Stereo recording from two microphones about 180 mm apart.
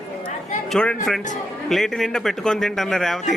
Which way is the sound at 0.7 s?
5° left (ahead or behind).